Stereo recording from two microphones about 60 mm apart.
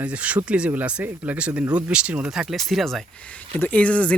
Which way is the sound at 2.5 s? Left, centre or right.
Centre.